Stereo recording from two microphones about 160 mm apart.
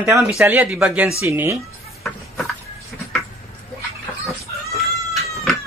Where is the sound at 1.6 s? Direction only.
Centre (ahead or behind).